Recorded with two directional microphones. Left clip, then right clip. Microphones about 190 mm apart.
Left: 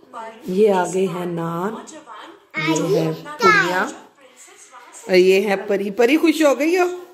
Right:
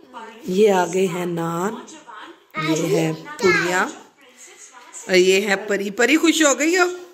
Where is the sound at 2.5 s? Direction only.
25° left (ahead or behind).